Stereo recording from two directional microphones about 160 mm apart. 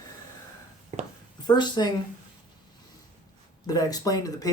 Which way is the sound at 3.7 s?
25° left (ahead or behind).